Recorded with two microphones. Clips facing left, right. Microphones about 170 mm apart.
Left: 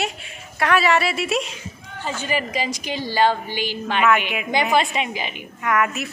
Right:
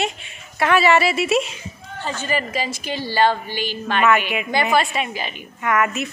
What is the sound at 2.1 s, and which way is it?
A woman's voice, 10° left (ahead or behind).